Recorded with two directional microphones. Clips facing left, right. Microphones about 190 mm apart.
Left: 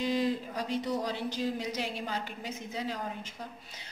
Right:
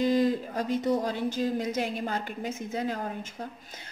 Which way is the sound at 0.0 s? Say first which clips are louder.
Right 5 dB; 45° right (ahead or behind).